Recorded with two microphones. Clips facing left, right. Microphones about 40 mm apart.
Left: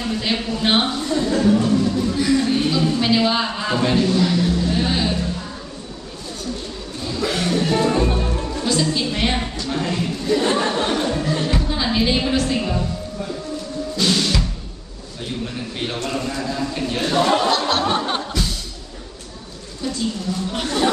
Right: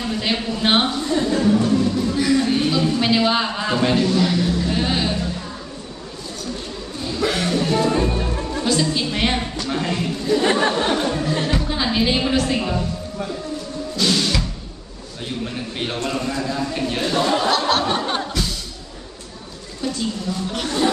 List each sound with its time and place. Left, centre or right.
0.0 s speech: centre
1.2 s music: centre
7.1 s a sound: centre
7.9 s music: centre
10.5 s speech: centre
10.8 s music: centre
13.9 s music: centre
16.0 s speech: centre
17.1 s music: centre
20.5 s speech: centre